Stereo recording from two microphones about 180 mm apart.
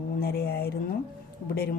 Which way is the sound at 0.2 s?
60° left (ahead or behind).